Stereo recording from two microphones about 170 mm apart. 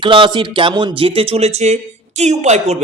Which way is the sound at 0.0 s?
30° right (ahead or behind).